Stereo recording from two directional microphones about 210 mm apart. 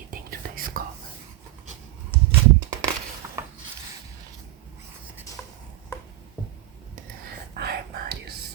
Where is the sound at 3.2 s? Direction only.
15° right (ahead or behind).